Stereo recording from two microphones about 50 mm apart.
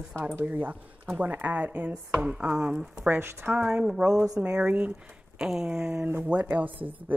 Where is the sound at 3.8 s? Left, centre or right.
Centre.